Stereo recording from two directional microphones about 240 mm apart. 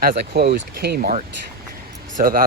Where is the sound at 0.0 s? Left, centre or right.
Right.